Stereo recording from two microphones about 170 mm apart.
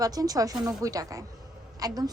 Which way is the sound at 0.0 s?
20° right (ahead or behind).